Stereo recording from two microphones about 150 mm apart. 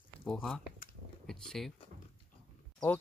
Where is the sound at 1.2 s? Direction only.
Centre (ahead or behind).